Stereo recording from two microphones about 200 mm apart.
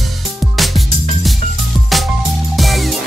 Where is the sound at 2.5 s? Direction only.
Centre (ahead or behind).